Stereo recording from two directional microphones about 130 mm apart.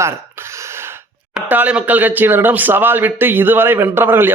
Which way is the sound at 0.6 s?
20° right (ahead or behind).